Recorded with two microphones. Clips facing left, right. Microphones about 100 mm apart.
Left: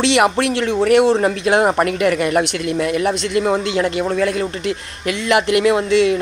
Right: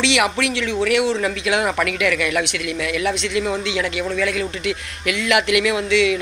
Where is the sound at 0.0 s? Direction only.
40° left (ahead or behind).